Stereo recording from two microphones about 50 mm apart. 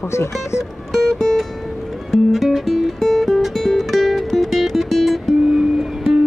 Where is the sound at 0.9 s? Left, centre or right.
Centre.